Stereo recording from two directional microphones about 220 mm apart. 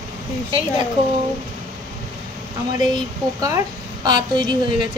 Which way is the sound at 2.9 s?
20° right (ahead or behind).